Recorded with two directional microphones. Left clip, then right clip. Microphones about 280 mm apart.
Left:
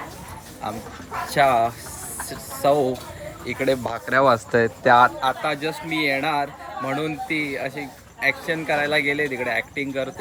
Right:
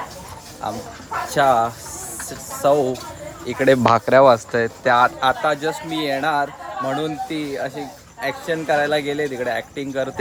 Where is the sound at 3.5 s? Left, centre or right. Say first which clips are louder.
Right 6 dB; right.